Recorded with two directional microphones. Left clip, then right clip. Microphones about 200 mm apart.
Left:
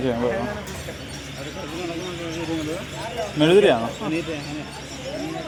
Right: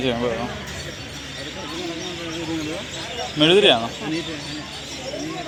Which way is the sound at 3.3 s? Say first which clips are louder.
Right 1 dB; 10° left (ahead or behind).